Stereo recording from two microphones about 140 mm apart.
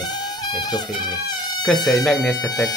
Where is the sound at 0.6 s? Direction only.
30° left (ahead or behind).